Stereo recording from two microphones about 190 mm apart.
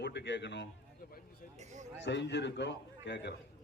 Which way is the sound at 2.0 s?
65° left (ahead or behind).